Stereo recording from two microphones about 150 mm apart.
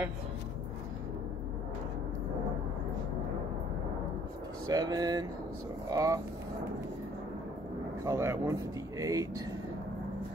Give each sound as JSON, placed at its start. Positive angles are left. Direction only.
{"t": 4.6, "sound": "speech", "side_deg": -25}
{"t": 8.0, "sound": "speech", "side_deg": -20}